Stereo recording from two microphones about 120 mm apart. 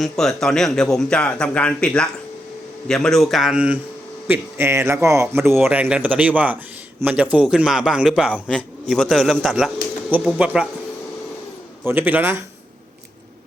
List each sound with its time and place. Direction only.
0.0 s a man's voice: 5° left (ahead or behind)
4.3 s a man's voice: 20° right (ahead or behind)
5.5 s a man's voice: 5° right (ahead or behind)
5.8 s a man's voice: 15° right (ahead or behind)
10.1 s speech: 10° right (ahead or behind)
11.9 s speech: 15° right (ahead or behind)